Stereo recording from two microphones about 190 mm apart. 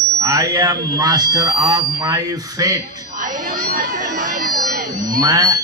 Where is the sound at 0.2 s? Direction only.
20° right (ahead or behind).